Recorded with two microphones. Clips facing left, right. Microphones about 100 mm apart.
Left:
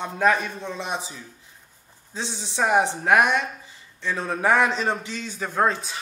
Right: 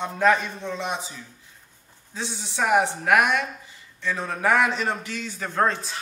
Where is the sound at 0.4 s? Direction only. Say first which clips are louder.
Right 1 dB; 15° left (ahead or behind).